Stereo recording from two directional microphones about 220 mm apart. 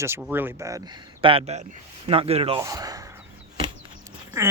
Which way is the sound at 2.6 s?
15° right (ahead or behind).